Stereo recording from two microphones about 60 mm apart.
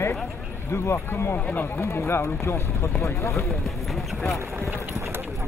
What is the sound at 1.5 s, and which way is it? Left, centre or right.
Speech, left.